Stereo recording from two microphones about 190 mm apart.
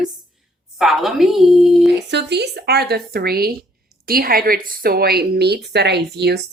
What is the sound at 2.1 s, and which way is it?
A woman's voice, 65° right (ahead or behind).